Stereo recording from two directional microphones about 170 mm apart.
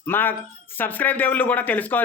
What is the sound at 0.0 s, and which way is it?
Speech, 10° left (ahead or behind).